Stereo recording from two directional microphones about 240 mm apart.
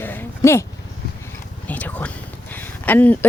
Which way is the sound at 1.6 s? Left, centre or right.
Centre.